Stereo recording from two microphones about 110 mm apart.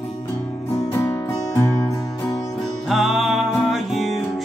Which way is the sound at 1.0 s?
25° left (ahead or behind).